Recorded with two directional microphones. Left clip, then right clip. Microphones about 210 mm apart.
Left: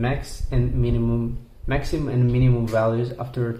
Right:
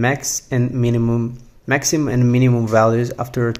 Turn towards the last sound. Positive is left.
turn(degrees=-35)  # may be behind; listen again after turning